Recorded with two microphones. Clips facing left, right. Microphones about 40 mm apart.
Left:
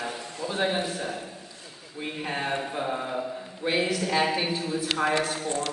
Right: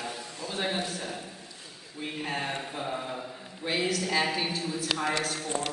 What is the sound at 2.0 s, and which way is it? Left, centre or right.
Mantra, centre.